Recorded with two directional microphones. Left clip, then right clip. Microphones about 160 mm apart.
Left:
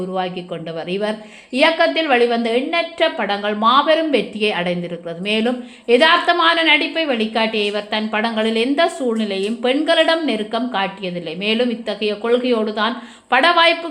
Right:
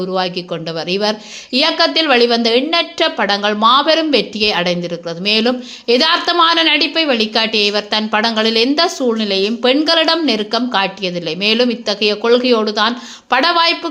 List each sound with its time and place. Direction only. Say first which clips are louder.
0.1 s a man's voice: right 5 dB; 30° right (ahead or behind)